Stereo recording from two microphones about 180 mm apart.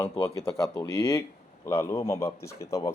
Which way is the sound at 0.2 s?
20° left (ahead or behind).